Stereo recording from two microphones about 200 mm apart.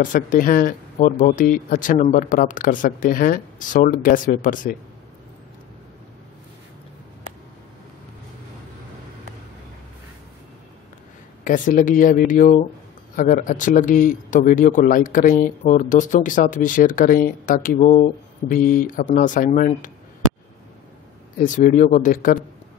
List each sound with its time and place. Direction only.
0.0 s speech: 40° left (ahead or behind)
11.4 s speech: 40° left (ahead or behind)
21.4 s speech: 40° left (ahead or behind)